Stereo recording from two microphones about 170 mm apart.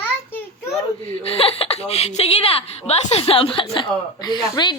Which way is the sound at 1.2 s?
35° left (ahead or behind).